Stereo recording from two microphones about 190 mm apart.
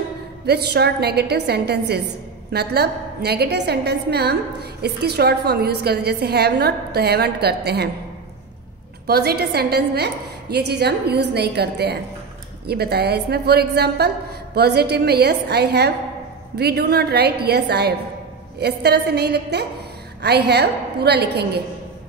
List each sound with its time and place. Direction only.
0.5 s a woman's voice: 60° right (ahead or behind)
9.0 s a woman's voice: 55° right (ahead or behind)